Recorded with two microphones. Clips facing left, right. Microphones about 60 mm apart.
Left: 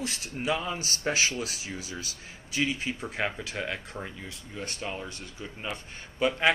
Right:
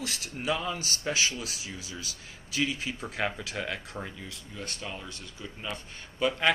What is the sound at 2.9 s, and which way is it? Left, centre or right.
Speech, centre.